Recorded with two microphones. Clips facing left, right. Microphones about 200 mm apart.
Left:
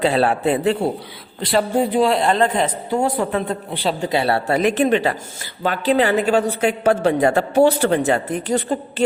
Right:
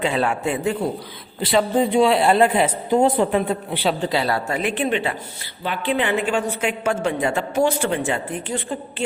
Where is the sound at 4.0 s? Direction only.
25° left (ahead or behind).